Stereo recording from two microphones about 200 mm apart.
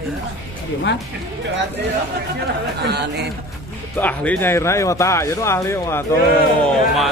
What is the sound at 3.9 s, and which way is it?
Speech, 10° left (ahead or behind).